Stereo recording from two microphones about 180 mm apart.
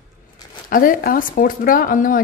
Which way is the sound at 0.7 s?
50° left (ahead or behind).